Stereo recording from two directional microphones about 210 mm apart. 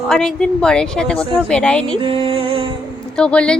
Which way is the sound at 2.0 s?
25° right (ahead or behind).